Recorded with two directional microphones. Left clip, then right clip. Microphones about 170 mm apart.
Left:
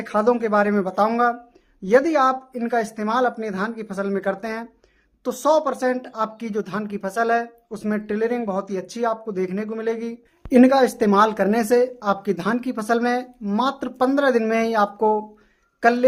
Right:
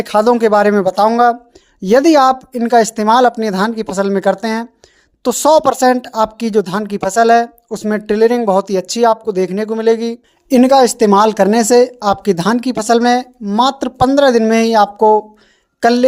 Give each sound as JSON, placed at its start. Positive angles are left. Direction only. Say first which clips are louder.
{"t": 0.0, "sound": "speech", "louder": "right 9 dB", "side_deg": -50}